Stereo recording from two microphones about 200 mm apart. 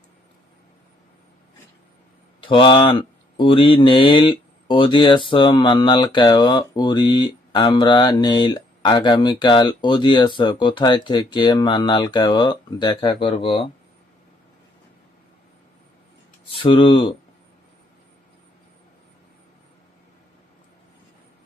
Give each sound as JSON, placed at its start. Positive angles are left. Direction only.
{"t": 2.4, "sound": "speech", "side_deg": 25}
{"t": 16.5, "sound": "speech", "side_deg": 25}